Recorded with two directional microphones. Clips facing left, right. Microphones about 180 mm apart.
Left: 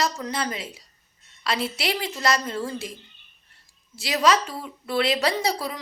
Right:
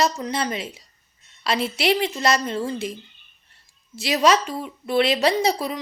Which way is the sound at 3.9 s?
25° right (ahead or behind).